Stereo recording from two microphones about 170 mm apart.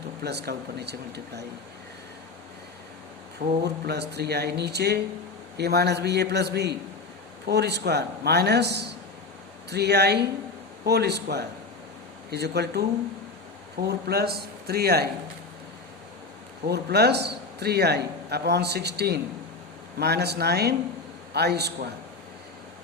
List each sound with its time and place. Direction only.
0.2 s a man's voice: 70° right (ahead or behind)
3.6 s a man's voice: 75° right (ahead or behind)
13.8 s a man's voice: 70° right (ahead or behind)
16.6 s a man's voice: 75° right (ahead or behind)